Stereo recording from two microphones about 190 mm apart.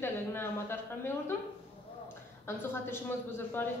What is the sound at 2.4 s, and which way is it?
A woman's voice, 10° left (ahead or behind).